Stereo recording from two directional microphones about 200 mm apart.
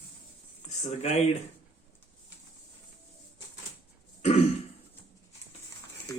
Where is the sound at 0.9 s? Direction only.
35° left (ahead or behind).